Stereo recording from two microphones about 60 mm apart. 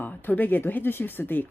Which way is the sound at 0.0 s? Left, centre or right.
Left.